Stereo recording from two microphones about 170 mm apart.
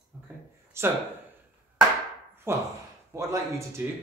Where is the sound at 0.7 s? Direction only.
15° right (ahead or behind).